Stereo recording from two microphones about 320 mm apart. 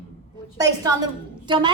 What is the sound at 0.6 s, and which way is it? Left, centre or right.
A woman's voice, centre.